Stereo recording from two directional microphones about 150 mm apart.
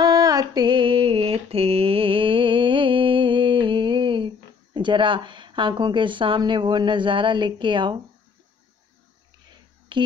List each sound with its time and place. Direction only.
0.0 s mantra: 25° right (ahead or behind)
4.7 s speech: 30° right (ahead or behind)
9.5 s a sound: 30° right (ahead or behind)